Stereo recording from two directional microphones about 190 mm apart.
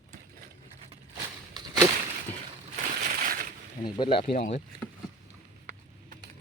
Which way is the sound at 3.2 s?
50° right (ahead or behind).